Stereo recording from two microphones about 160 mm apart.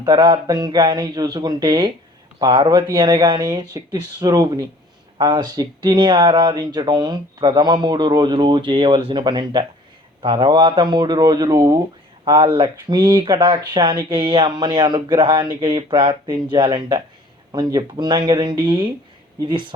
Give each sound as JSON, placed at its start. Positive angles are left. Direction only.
{"t": 0.0, "sound": "speech", "side_deg": -25}